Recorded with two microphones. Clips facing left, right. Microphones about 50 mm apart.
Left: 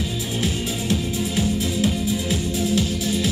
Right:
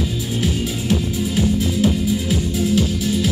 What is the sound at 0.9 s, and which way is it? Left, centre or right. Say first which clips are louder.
Music: right 3 dB; right.